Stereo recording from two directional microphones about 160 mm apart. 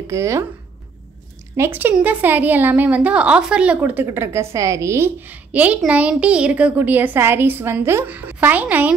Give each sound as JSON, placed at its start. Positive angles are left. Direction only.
{"t": 0.0, "sound": "speech", "side_deg": -20}
{"t": 1.6, "sound": "a woman's voice", "side_deg": -10}